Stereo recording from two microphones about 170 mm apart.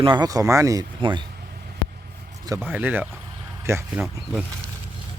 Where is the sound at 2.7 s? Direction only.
10° right (ahead or behind).